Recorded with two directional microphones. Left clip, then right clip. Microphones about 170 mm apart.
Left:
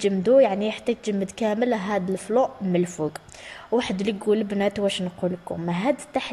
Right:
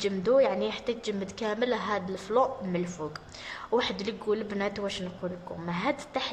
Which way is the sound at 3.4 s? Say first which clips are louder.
Left 3 dB; 10° left (ahead or behind).